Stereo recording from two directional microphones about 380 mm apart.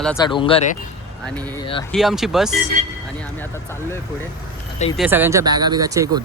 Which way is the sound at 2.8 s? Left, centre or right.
Centre.